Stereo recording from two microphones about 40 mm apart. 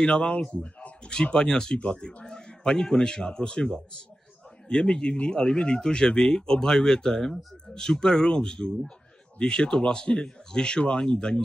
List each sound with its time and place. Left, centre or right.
0.0 s a man's voice: left